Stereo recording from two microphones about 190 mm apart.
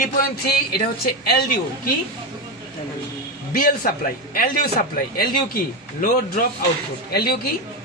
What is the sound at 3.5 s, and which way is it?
A man's voice, 50° left (ahead or behind).